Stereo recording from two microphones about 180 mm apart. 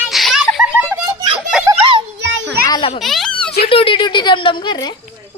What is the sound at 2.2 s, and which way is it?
Children playing, 75° right (ahead or behind).